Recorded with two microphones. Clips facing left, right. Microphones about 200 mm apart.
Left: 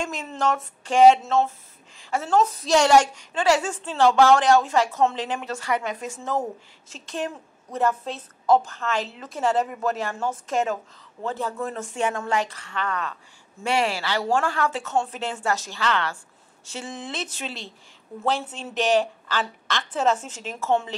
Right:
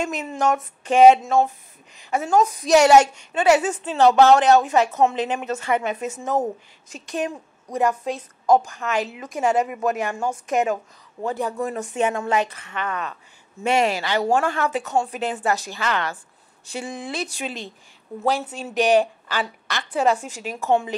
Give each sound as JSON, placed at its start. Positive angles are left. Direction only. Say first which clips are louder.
{"t": 0.0, "sound": "a woman's voice", "louder": "right 3 dB", "side_deg": -20}